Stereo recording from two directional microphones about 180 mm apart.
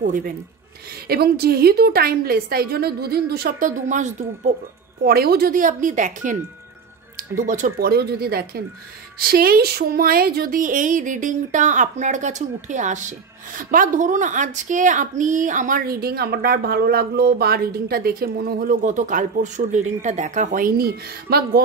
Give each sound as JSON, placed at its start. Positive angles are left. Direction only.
{"t": 0.0, "sound": "a woman's voice", "side_deg": -50}
{"t": 5.0, "sound": "a woman's voice", "side_deg": -60}
{"t": 7.3, "sound": "a woman's voice", "side_deg": -45}